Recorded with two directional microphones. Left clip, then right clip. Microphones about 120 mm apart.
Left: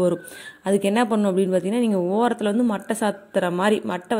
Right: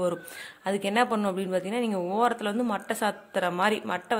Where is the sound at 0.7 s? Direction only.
30° left (ahead or behind).